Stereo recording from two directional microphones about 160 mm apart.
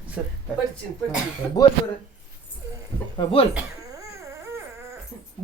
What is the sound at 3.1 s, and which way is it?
Speech, 35° left (ahead or behind).